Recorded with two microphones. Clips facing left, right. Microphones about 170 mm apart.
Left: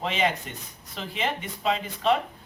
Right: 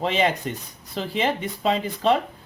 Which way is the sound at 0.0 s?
35° right (ahead or behind).